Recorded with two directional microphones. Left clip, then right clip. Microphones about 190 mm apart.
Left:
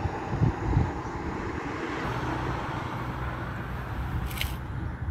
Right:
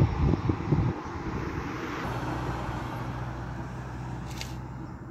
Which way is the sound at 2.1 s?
55° right (ahead or behind).